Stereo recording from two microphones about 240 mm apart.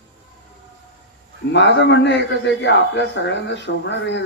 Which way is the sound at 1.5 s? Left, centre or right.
Left.